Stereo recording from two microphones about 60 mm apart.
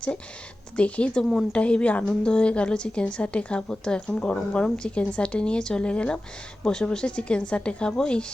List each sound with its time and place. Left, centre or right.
0.8 s a woman's voice: left